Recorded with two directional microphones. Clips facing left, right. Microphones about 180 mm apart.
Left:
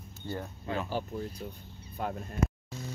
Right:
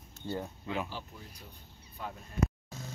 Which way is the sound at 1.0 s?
50° left (ahead or behind).